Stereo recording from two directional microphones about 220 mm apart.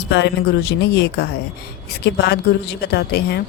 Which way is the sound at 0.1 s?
50° left (ahead or behind).